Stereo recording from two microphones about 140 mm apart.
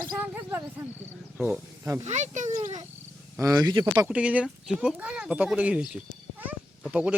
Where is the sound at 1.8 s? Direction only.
20° right (ahead or behind).